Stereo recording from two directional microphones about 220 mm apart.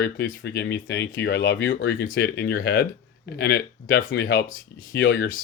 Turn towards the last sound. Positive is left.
turn(degrees=60)  # may be behind; listen again after turning